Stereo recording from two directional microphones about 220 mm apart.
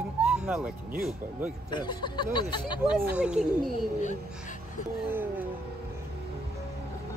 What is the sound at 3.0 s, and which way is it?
Speech, 5° right (ahead or behind).